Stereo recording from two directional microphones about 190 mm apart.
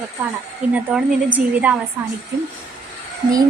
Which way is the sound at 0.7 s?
10° right (ahead or behind).